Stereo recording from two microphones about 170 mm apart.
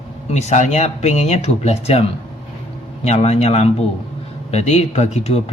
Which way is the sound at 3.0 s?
40° left (ahead or behind).